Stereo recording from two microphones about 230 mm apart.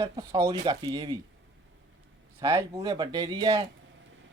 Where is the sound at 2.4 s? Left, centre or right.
Centre.